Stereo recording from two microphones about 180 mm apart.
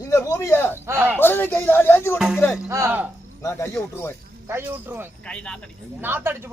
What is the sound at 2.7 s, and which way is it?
Speech, 15° right (ahead or behind).